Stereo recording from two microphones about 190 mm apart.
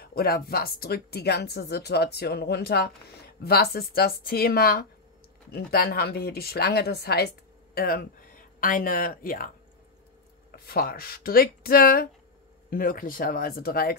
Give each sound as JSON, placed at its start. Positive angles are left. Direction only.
{"t": 0.0, "sound": "a woman's voice", "side_deg": 55}
{"t": 10.5, "sound": "speech", "side_deg": 55}